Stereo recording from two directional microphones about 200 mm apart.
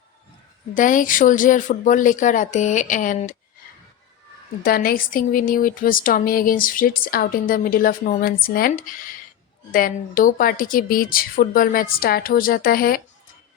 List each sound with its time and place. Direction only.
0.7 s speech: 40° left (ahead or behind)
4.6 s speech: 45° left (ahead or behind)